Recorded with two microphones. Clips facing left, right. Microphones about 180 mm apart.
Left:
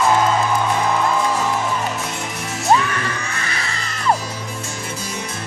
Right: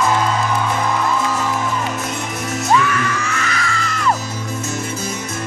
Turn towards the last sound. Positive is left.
turn(degrees=35)  # may be behind; listen again after turning